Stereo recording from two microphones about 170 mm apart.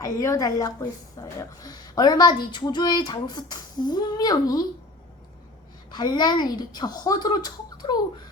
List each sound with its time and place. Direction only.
0.0 s speech: 20° left (ahead or behind)
5.9 s speech: 25° left (ahead or behind)